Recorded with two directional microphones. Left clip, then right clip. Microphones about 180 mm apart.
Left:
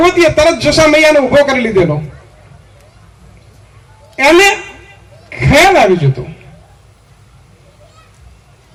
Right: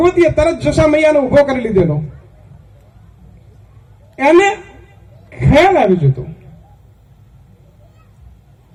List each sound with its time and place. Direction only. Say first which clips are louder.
0.0 s a man's voice: left 3 dB; 15° left (ahead or behind)
4.1 s a woman's voice: left 3 dB; 20° left (ahead or behind)